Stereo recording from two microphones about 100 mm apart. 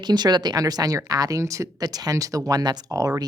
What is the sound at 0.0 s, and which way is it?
Speech, 45° right (ahead or behind).